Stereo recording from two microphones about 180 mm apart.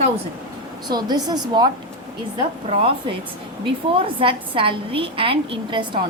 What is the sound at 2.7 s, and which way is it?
A woman's voice, 30° right (ahead or behind).